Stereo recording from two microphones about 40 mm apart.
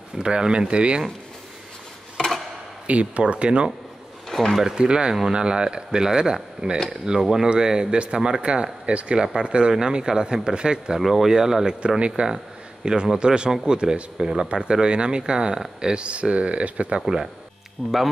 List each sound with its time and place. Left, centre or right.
0.2 s speech: right
2.1 s tick-tock: centre
2.9 s speech: right
4.3 s a sound: centre
4.6 s speech: right
11.0 s speech: centre
12.2 s speech: right
17.0 s speech: centre
17.8 s speech: right